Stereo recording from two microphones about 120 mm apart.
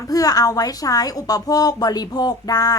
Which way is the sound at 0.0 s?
30° left (ahead or behind).